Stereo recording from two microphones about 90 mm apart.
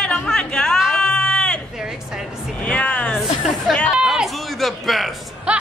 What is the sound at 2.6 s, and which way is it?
Music, 15° left (ahead or behind).